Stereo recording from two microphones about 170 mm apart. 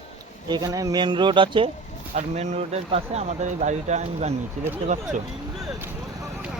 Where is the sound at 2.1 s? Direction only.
40° right (ahead or behind).